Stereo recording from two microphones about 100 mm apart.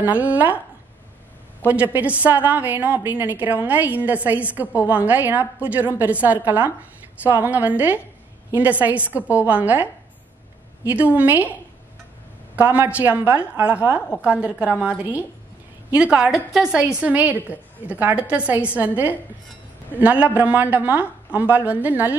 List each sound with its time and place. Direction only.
0.0 s a woman's voice: 15° right (ahead or behind)
1.7 s a woman's voice: 15° right (ahead or behind)
12.5 s a woman's voice: 15° right (ahead or behind)